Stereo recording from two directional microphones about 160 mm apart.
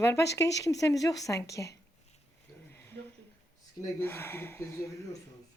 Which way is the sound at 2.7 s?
10° left (ahead or behind).